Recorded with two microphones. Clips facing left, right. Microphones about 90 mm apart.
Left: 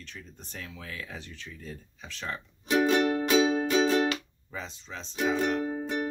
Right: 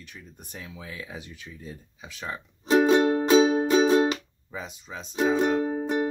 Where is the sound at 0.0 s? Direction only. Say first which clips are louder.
Even; 10° right (ahead or behind).